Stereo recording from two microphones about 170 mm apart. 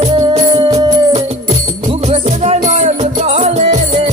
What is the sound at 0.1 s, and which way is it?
Music, 25° right (ahead or behind).